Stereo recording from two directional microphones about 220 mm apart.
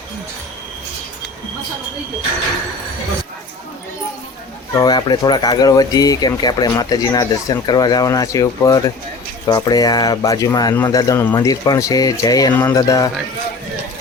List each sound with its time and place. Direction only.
4.7 s speech: 15° left (ahead or behind)